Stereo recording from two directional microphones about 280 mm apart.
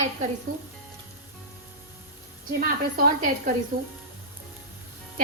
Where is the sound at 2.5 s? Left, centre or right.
Right.